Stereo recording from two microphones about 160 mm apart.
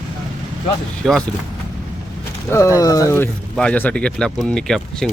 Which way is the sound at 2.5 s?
20° left (ahead or behind).